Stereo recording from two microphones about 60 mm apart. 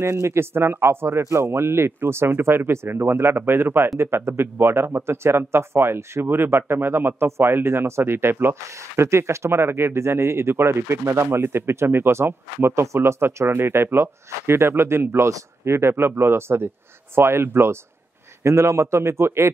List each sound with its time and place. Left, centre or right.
0.0 s speech: right
4.0 s speech: right